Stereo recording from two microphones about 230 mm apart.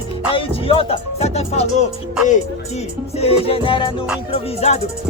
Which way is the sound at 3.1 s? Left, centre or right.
Left.